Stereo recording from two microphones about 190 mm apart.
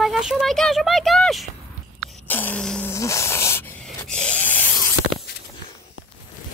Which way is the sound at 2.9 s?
15° left (ahead or behind).